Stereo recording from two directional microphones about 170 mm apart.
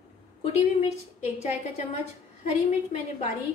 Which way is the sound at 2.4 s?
40° left (ahead or behind).